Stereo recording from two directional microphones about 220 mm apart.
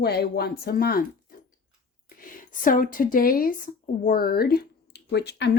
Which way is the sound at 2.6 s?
40° left (ahead or behind).